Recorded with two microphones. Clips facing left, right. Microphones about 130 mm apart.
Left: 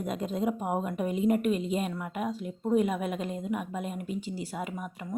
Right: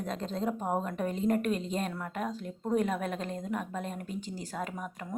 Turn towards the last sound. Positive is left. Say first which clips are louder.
# left 2 dB
turn(degrees=5)  # may be behind; listen again after turning